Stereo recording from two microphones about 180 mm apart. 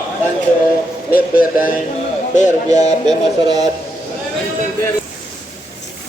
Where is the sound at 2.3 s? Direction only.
40° left (ahead or behind).